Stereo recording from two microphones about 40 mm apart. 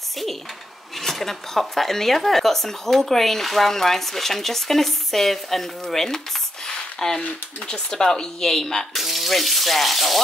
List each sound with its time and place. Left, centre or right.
0.9 s speech: centre
6.7 s a sound: centre
7.6 s speech: centre
8.9 s speech: centre